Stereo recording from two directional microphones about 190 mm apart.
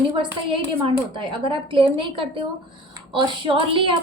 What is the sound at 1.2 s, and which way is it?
A woman's voice, 25° right (ahead or behind).